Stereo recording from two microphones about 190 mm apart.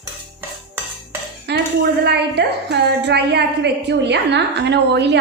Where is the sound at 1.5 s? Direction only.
60° right (ahead or behind).